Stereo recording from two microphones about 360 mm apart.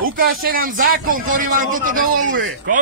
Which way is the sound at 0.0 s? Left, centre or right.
Right.